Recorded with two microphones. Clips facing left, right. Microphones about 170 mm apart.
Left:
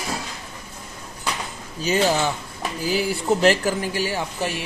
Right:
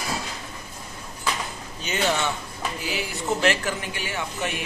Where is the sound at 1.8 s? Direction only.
35° left (ahead or behind).